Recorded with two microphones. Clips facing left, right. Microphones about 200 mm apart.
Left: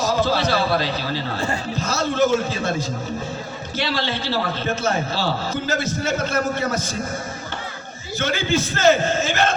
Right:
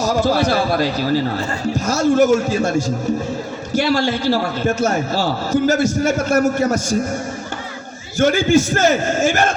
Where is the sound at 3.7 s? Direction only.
10° right (ahead or behind).